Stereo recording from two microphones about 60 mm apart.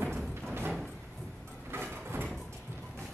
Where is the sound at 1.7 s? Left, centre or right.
Right.